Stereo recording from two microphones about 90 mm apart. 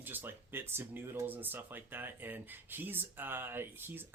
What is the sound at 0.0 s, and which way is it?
Speech, 25° right (ahead or behind).